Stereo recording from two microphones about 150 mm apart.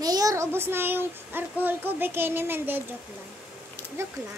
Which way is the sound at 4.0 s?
15° right (ahead or behind).